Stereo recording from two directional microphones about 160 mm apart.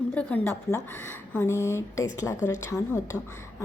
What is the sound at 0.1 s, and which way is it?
A woman's voice, 10° left (ahead or behind).